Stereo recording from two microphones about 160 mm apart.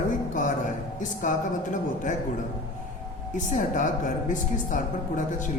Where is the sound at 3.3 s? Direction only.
55° left (ahead or behind).